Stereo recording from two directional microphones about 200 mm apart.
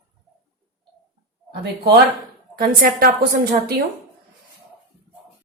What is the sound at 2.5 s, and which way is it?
A woman's voice, 50° right (ahead or behind).